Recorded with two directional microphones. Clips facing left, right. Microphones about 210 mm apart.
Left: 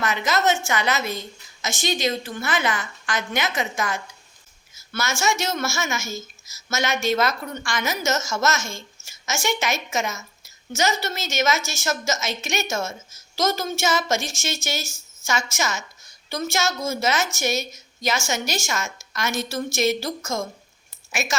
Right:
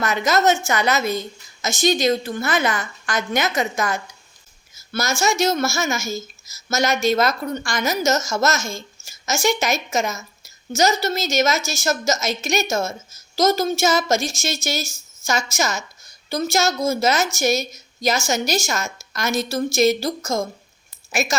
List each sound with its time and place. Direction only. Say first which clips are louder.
0.0 s a woman's voice: right 4 dB; 40° right (ahead or behind)